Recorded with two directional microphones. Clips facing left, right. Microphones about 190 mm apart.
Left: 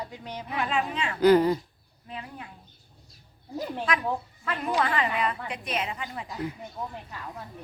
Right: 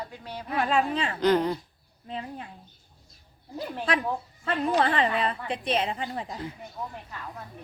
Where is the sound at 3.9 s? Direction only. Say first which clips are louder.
Right 3 dB; 30° right (ahead or behind).